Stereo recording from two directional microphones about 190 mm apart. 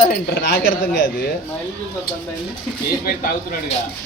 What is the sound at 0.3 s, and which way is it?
Speech, 70° left (ahead or behind).